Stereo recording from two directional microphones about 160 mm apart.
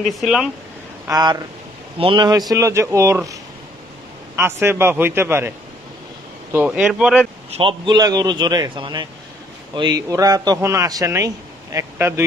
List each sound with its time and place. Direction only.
0.0 s speech: centre (ahead or behind)
1.0 s a man's voice: 20° right (ahead or behind)
4.4 s a man's voice: 15° right (ahead or behind)
6.5 s speech: 10° right (ahead or behind)
7.5 s a man's voice: 30° right (ahead or behind); by 12.3 s 15° right (ahead or behind)